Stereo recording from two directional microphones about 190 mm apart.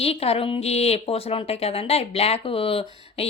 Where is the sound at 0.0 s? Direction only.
30° left (ahead or behind).